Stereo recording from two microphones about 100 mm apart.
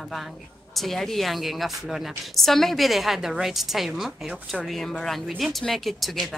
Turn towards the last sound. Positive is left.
turn(degrees=0)  # may be behind; listen again after turning